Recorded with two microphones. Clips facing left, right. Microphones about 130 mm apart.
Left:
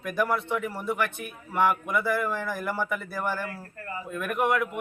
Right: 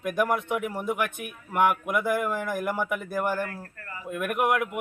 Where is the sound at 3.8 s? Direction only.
25° left (ahead or behind).